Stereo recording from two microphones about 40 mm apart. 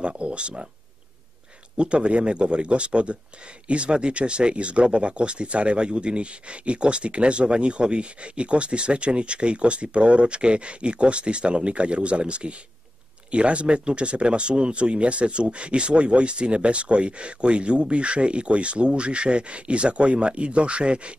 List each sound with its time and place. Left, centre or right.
0.0 s speech: right
1.8 s speech: right